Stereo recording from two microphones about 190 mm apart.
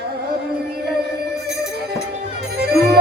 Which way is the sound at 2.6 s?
60° right (ahead or behind).